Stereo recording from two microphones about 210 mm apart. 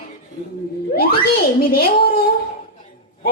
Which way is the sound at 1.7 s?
45° left (ahead or behind).